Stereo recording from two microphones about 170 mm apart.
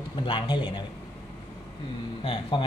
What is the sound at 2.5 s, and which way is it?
Speech, 30° left (ahead or behind).